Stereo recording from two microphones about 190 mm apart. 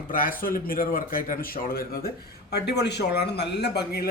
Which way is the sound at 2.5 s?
60° left (ahead or behind).